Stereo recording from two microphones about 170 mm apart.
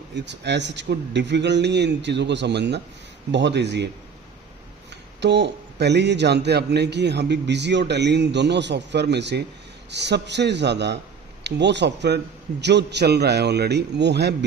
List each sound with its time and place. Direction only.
0.1 s a man's voice: 90° right
5.2 s a man's voice: 90° right